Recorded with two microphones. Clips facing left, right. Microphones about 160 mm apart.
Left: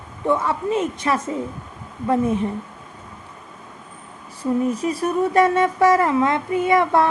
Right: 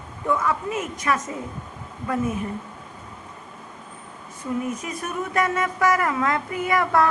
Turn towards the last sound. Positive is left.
turn(degrees=25)  # may be behind; listen again after turning